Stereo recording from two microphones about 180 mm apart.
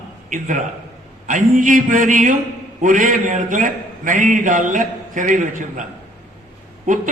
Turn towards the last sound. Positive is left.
turn(degrees=-45)  # may be behind; listen again after turning